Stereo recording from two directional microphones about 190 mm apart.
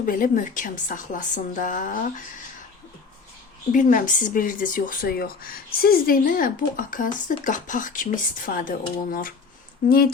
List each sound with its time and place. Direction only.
0.0 s speech: 45° left (ahead or behind)
3.7 s speech: 45° left (ahead or behind)